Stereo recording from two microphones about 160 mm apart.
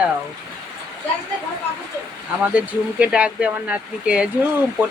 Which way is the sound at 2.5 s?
10° right (ahead or behind).